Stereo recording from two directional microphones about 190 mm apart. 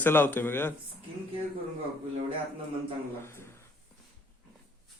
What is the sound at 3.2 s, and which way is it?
Speech, 15° left (ahead or behind).